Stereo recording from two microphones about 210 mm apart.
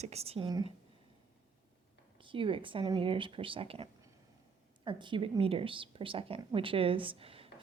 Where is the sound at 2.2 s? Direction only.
25° right (ahead or behind).